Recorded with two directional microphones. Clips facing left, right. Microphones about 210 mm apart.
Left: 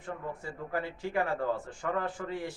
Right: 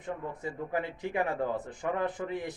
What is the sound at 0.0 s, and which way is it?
A man's voice, 20° right (ahead or behind).